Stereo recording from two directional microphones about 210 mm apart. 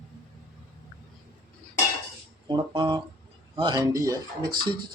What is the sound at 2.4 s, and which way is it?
Guitar, 20° right (ahead or behind).